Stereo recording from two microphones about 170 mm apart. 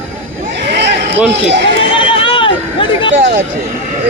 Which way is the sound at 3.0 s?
90° right.